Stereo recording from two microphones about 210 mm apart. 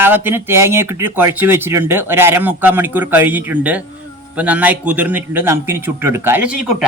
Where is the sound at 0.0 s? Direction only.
10° right (ahead or behind).